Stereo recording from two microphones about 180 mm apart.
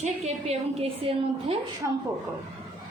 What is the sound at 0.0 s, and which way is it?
A woman's voice, 35° right (ahead or behind).